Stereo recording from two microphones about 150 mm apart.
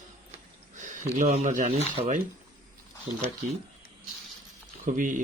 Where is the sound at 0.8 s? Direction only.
55° right (ahead or behind).